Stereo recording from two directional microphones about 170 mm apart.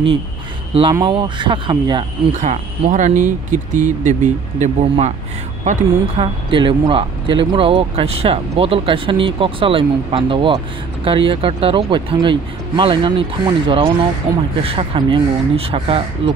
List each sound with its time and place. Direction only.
1.0 s speech: 30° right (ahead or behind)
2.3 s speech: 45° right (ahead or behind)
6.5 s speech: 30° right (ahead or behind)